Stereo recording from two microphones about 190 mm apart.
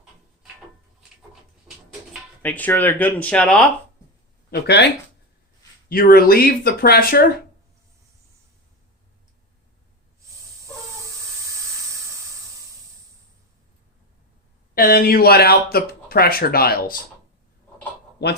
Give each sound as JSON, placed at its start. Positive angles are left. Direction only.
{"t": 2.4, "sound": "speech", "side_deg": 10}
{"t": 4.6, "sound": "speech", "side_deg": 60}
{"t": 5.9, "sound": "speech", "side_deg": 50}
{"t": 14.8, "sound": "speech", "side_deg": 50}
{"t": 18.2, "sound": "speech", "side_deg": 60}